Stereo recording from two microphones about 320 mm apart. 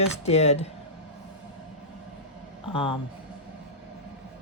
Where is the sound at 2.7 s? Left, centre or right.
Centre.